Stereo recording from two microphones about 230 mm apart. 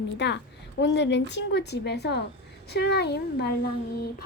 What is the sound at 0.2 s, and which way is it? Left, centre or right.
A woman's voice, left.